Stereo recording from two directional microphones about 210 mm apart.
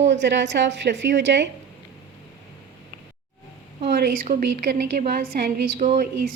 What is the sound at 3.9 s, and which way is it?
A woman's voice, 45° right (ahead or behind).